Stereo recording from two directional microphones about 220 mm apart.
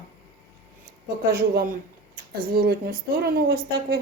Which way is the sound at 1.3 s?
40° right (ahead or behind).